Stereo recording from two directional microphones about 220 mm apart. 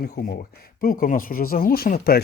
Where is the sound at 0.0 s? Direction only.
40° left (ahead or behind).